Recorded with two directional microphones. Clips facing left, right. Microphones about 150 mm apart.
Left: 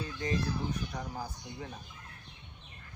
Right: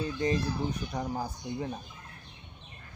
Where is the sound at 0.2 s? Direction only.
20° right (ahead or behind).